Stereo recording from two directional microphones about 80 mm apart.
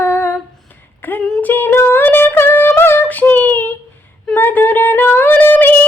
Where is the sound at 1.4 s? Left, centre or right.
Left.